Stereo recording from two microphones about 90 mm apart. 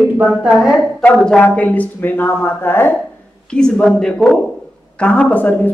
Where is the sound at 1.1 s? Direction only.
5° left (ahead or behind); by 2.9 s 25° left (ahead or behind).